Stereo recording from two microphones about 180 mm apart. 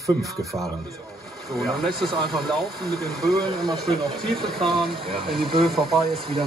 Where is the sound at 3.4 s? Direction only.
25° right (ahead or behind).